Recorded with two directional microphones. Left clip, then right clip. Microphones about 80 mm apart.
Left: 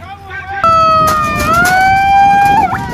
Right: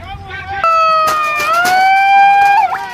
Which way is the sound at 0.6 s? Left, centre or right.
Centre.